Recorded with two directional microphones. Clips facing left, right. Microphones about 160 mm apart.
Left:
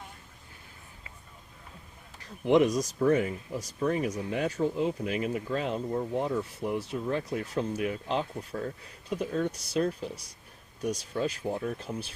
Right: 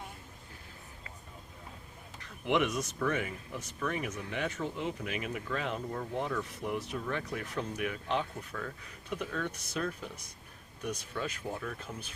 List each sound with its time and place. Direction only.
2.2 s speech: 35° left (ahead or behind)